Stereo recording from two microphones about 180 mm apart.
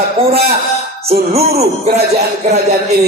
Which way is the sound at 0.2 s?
35° right (ahead or behind).